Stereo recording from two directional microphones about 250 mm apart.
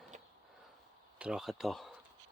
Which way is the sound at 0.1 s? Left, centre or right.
Right.